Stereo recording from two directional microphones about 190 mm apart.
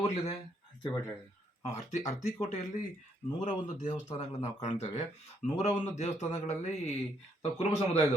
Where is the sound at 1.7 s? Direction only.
35° left (ahead or behind).